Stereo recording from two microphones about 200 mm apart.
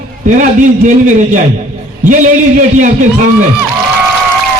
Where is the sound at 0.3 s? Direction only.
40° right (ahead or behind).